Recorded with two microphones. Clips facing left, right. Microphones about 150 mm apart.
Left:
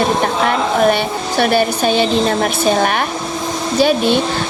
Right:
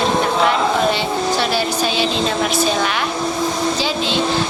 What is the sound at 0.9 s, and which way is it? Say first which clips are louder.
Speech: left 2 dB; 60° left (ahead or behind).